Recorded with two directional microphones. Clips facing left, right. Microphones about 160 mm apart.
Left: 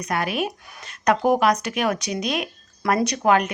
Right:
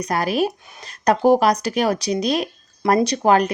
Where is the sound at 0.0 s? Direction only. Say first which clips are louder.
Right 4 dB; 35° right (ahead or behind).